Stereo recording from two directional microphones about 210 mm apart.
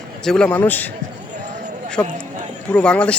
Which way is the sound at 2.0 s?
10° left (ahead or behind).